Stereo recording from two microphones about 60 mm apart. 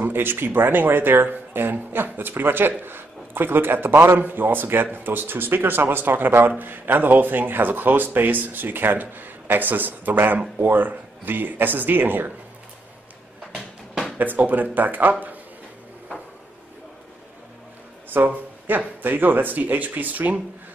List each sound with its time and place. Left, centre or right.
0.0 s speech: right
14.1 s speech: right
18.1 s speech: right